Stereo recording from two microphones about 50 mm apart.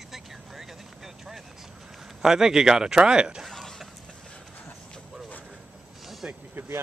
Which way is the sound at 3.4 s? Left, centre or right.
Centre.